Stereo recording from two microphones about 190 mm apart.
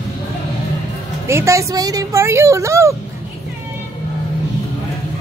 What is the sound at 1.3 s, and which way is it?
Speech, 15° right (ahead or behind).